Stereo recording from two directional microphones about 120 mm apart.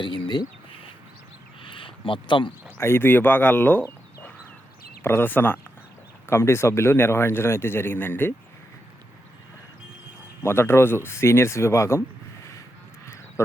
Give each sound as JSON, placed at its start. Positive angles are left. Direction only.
{"t": 0.0, "sound": "a sound", "side_deg": 40}
{"t": 2.7, "sound": "speech", "side_deg": 20}
{"t": 10.4, "sound": "speech", "side_deg": 20}